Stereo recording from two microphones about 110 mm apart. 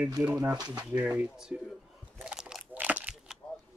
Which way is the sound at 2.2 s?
10° right (ahead or behind).